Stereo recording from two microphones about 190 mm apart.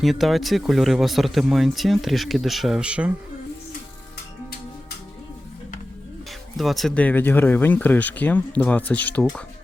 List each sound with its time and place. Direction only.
0.0 s speech: centre (ahead or behind)
6.6 s speech: centre (ahead or behind)